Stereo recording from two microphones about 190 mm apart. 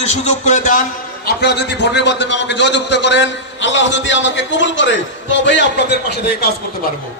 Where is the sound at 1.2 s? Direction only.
60° left (ahead or behind).